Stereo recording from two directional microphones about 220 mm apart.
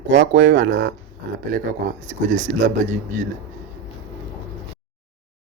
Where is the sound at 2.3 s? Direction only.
35° right (ahead or behind).